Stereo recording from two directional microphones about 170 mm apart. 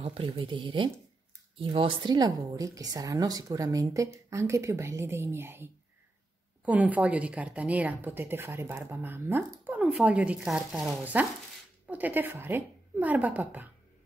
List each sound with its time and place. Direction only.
0.0 s a woman's voice: 35° right (ahead or behind); by 13.7 s 10° right (ahead or behind)